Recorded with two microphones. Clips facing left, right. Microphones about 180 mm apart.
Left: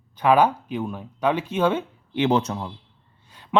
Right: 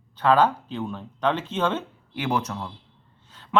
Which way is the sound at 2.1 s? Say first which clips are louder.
Left 6 dB; 25° left (ahead or behind).